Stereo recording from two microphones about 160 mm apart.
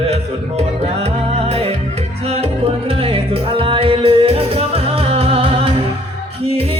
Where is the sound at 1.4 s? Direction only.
40° right (ahead or behind).